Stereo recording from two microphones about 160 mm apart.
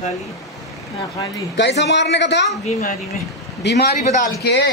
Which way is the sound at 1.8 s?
90° left.